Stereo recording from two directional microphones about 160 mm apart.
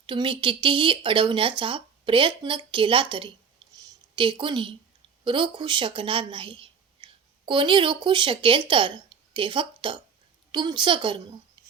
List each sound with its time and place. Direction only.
0.0 s speech: 30° right (ahead or behind)
3.6 s a sound: 25° right (ahead or behind)
4.1 s a woman's voice: 30° right (ahead or behind)